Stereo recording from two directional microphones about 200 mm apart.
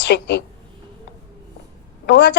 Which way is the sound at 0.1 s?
55° left (ahead or behind).